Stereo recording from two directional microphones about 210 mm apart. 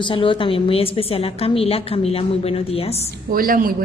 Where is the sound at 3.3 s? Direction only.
45° right (ahead or behind).